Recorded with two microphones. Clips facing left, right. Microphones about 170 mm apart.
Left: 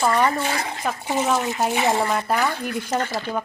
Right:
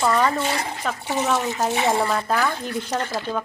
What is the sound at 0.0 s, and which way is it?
A woman's voice, 10° left (ahead or behind).